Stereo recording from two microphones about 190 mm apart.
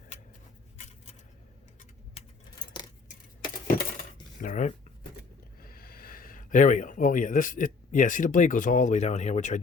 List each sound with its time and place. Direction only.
4.4 s speech: 45° left (ahead or behind)